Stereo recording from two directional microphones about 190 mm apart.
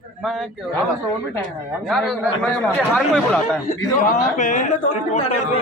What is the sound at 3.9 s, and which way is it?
Speech, 45° left (ahead or behind).